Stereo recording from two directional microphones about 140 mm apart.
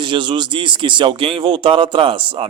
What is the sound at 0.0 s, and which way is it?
Speech, 35° right (ahead or behind).